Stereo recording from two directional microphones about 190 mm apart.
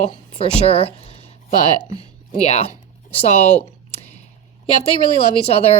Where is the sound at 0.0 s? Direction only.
30° left (ahead or behind).